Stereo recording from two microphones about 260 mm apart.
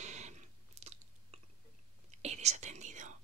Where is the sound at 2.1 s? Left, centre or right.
Right.